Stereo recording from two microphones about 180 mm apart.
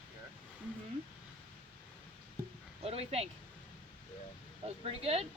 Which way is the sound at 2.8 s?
35° right (ahead or behind).